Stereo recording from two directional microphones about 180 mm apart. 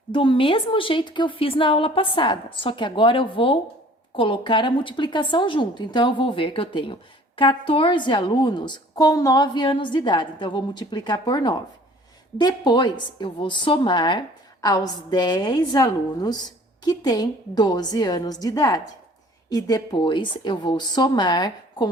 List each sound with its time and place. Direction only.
0.1 s a woman's voice: 30° left (ahead or behind)